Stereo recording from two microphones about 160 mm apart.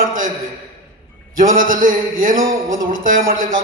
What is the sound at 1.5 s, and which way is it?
Speech, 60° right (ahead or behind).